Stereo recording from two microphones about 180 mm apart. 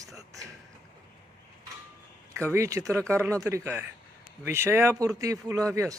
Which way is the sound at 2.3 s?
15° right (ahead or behind).